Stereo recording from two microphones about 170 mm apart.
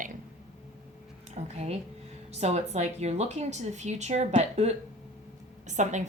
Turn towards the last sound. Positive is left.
turn(degrees=-45)  # may be behind; listen again after turning